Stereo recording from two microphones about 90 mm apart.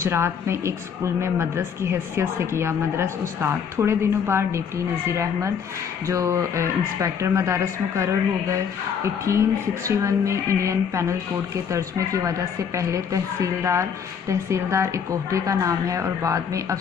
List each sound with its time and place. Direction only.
0.0 s a woman's voice: 30° right (ahead or behind)